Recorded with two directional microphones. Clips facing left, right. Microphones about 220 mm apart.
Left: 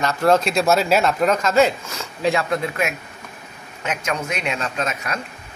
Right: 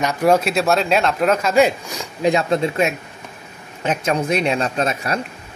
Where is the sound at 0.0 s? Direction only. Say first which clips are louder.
Right 1 dB; 15° right (ahead or behind); by 5.2 s 35° right (ahead or behind).